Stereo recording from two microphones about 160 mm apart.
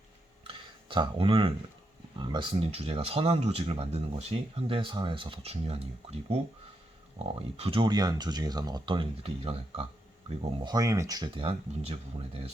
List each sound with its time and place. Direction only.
0.4 s a sound: 30° right (ahead or behind)
2.1 s speech: 30° right (ahead or behind)
7.5 s speech: 35° right (ahead or behind)
10.6 s speech: 25° right (ahead or behind)